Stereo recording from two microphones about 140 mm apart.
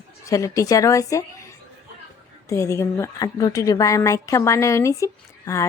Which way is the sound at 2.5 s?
20° left (ahead or behind).